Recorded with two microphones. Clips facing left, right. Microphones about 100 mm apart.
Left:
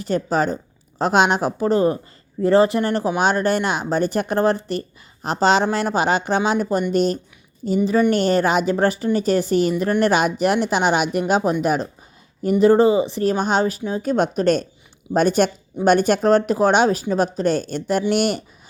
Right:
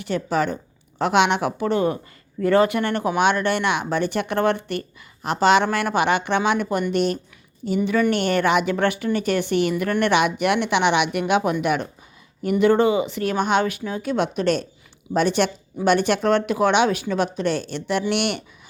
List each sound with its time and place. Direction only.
0.0 s speech: 35° left (ahead or behind)